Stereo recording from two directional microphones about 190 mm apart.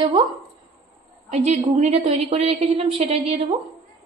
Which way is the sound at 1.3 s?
35° right (ahead or behind).